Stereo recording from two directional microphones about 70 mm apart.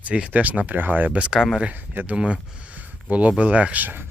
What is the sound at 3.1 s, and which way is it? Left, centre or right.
Speech, centre.